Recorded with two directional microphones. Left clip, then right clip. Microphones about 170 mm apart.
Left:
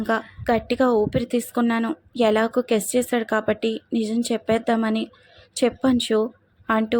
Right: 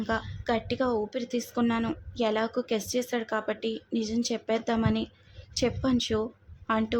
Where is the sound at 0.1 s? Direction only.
30° left (ahead or behind).